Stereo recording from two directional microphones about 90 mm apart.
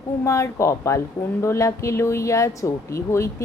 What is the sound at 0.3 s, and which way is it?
Speech, 35° left (ahead or behind).